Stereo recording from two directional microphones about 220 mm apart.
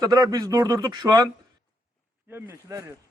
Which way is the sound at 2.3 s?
10° right (ahead or behind).